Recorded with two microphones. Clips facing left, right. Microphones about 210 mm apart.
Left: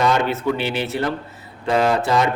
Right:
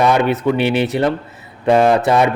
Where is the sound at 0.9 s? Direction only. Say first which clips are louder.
Right 6 dB; 20° right (ahead or behind).